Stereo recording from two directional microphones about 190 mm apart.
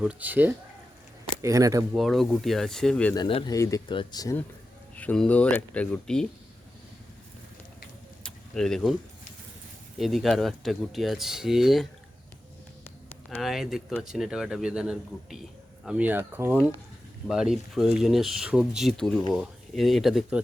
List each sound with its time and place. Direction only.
0.0 s speech: 5° right (ahead or behind)
2.0 s speech: centre (ahead or behind)
3.2 s speech: 25° left (ahead or behind)
4.9 s speech: 5° left (ahead or behind)
8.2 s keys jangling: 5° left (ahead or behind)
10.0 s speech: centre (ahead or behind)
13.4 s speech: centre (ahead or behind)